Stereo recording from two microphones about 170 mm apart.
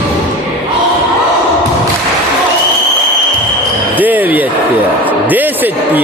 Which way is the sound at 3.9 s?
10° right (ahead or behind).